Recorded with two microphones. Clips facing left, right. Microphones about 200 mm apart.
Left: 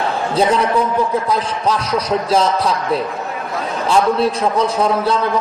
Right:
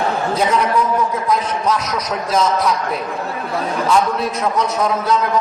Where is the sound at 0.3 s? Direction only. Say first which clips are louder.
Left 3 dB; 30° left (ahead or behind).